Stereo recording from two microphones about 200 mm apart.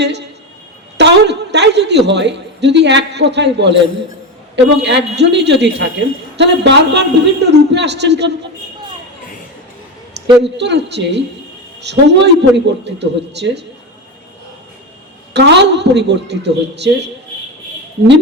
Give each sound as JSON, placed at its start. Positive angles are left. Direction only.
{"t": 0.0, "sound": "a man's voice", "side_deg": -60}
{"t": 10.6, "sound": "a man's voice", "side_deg": -60}
{"t": 15.3, "sound": "a man's voice", "side_deg": -60}